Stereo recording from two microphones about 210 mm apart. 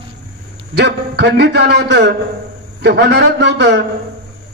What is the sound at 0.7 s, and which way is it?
A man's voice, 55° right (ahead or behind).